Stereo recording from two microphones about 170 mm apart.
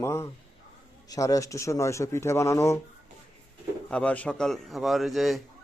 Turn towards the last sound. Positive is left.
turn(degrees=0)  # may be behind; listen again after turning